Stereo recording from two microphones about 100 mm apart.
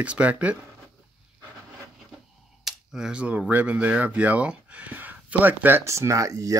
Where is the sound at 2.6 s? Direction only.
5° right (ahead or behind).